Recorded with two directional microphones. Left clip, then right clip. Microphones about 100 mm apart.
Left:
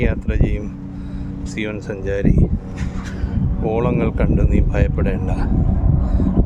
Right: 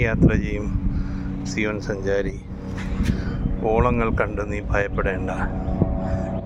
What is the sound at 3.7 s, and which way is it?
Speech, 30° left (ahead or behind).